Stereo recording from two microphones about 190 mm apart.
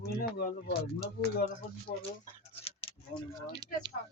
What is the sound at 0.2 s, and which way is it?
Speech, 55° left (ahead or behind).